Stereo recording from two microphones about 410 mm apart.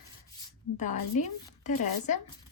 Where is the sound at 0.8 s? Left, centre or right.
Centre.